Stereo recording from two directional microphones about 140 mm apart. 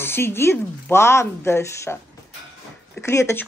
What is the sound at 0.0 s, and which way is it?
Speech, 15° left (ahead or behind).